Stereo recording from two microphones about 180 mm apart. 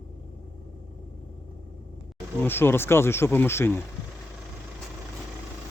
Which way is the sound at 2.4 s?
10° left (ahead or behind).